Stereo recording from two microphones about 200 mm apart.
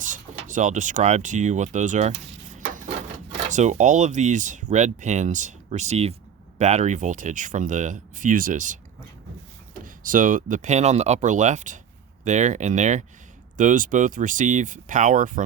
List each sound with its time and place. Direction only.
0.0 s speech: 40° right (ahead or behind)
3.5 s speech: 35° right (ahead or behind)
9.8 s speech: 40° right (ahead or behind)